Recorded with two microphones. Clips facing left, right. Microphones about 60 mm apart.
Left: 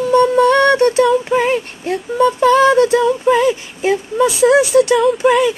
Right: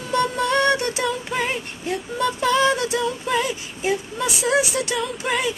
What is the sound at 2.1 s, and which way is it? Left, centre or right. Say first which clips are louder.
Music: left 9 dB; left.